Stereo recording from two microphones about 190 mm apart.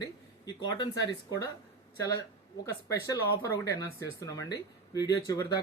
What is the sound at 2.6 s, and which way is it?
Speech, 20° left (ahead or behind).